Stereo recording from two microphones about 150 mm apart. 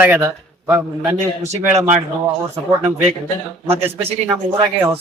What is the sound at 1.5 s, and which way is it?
Speech, 45° right (ahead or behind).